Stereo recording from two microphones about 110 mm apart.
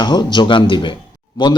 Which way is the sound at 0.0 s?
40° left (ahead or behind).